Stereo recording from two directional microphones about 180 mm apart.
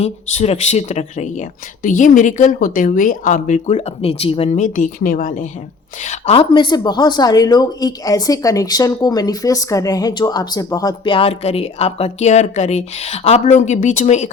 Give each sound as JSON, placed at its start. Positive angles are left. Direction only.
{"t": 0.0, "sound": "a woman's voice", "side_deg": 35}